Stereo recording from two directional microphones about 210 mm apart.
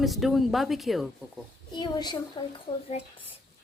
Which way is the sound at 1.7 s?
20° left (ahead or behind).